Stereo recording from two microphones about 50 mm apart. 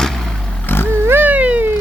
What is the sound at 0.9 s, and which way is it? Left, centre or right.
Cat, right.